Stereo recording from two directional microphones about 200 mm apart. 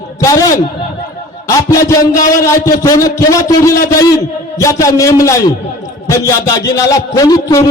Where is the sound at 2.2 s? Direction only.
45° left (ahead or behind).